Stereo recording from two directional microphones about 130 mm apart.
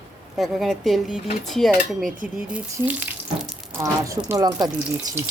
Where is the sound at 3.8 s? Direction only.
25° right (ahead or behind).